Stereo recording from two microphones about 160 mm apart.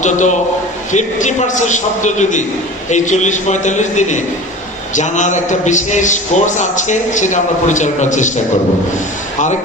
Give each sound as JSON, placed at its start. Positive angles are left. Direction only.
{"t": 0.0, "sound": "a man's voice", "side_deg": 50}